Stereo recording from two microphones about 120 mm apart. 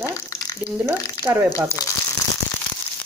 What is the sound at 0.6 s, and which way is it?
Speech, 10° right (ahead or behind).